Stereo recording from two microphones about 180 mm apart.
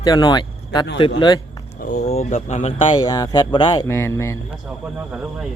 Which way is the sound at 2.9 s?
20° left (ahead or behind).